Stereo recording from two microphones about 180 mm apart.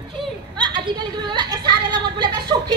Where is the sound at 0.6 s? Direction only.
25° right (ahead or behind).